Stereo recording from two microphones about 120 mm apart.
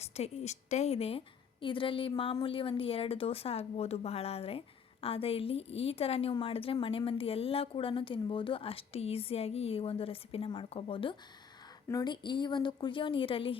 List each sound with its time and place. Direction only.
0.0 s speech: 65° left (ahead or behind); by 11.2 s 45° left (ahead or behind)
11.9 s a woman's voice: 35° left (ahead or behind)